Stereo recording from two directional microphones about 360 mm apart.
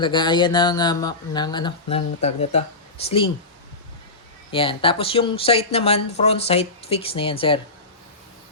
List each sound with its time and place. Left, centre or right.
0.0 s speech: centre
4.5 s speech: centre